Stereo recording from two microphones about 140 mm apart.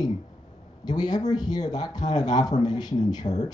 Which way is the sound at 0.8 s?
30° left (ahead or behind).